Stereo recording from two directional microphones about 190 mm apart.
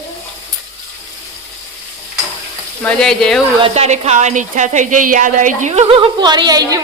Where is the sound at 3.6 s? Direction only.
35° right (ahead or behind).